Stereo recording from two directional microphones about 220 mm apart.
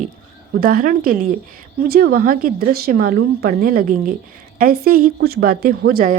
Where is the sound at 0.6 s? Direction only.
40° right (ahead or behind).